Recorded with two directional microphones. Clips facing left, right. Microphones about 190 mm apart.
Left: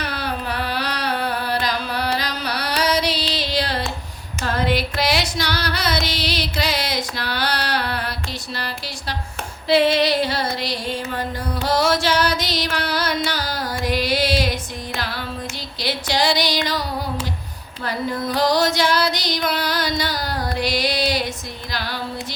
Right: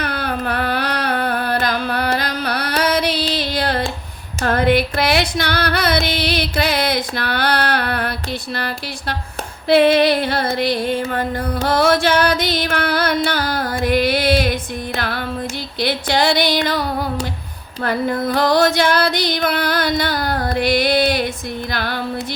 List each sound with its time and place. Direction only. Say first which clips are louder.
0.0 s carnatic music: right 4 dB; 55° right (ahead or behind)
4.4 s music: right 6 dB; 55° right (ahead or behind)
17.8 s music: right 5 dB; 55° right (ahead or behind)
21.7 s female singing: right 3 dB; 55° right (ahead or behind)